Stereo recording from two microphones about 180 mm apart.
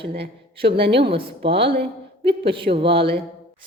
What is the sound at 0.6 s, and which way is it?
Speech, 65° right (ahead or behind).